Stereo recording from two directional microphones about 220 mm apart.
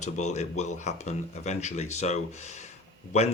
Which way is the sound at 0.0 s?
30° left (ahead or behind).